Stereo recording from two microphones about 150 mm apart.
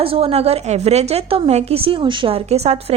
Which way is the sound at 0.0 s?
40° right (ahead or behind).